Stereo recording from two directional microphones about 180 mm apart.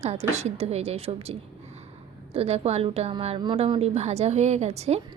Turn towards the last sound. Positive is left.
turn(degrees=-35)  # may be behind; listen again after turning